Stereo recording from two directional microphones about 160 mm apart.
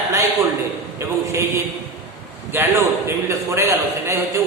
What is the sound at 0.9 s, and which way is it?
Speech, 15° right (ahead or behind).